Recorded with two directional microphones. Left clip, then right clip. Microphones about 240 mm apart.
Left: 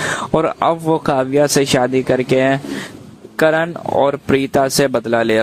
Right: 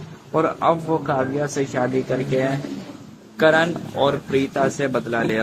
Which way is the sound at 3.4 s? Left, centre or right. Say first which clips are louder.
Left 2 dB; left.